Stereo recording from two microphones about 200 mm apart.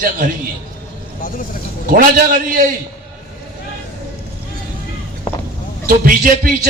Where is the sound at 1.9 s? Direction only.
45° right (ahead or behind).